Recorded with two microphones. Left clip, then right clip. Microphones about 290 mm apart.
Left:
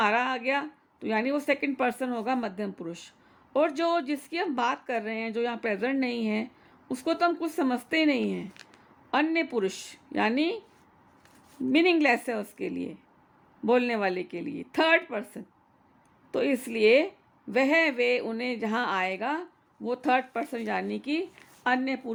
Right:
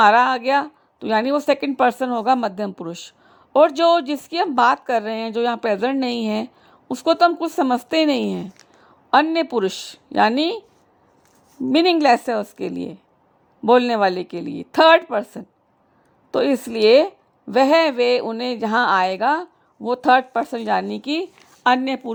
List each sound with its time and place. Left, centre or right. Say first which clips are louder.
0.0 s speech: right 12 dB; right
11.7 s speech: right 8 dB; right